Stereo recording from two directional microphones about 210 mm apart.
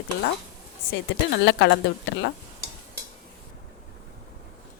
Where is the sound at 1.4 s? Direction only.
60° left (ahead or behind).